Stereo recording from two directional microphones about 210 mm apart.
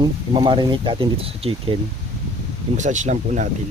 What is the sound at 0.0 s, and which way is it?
Speech, 20° right (ahead or behind).